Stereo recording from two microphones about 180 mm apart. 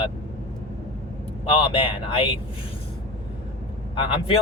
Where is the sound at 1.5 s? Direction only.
30° left (ahead or behind).